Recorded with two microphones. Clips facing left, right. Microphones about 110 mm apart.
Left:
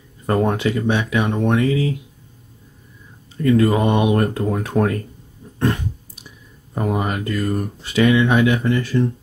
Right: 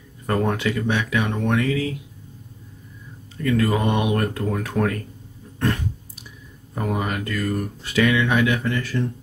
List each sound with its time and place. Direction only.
0.3 s speech: 25° left (ahead or behind)
3.4 s speech: 25° left (ahead or behind)
6.7 s speech: 25° left (ahead or behind)